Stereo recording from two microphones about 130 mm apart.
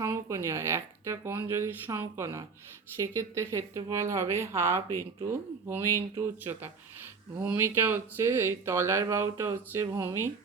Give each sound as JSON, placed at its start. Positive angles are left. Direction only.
{"t": 0.0, "sound": "speech", "side_deg": -20}